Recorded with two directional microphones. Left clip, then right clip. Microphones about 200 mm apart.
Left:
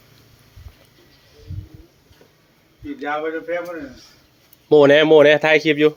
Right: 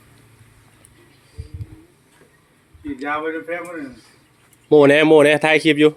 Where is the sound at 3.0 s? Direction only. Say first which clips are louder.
Even; 35° right (ahead or behind).